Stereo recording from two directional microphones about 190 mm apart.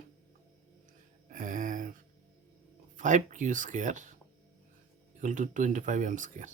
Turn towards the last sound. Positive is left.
turn(degrees=-40)  # may be behind; listen again after turning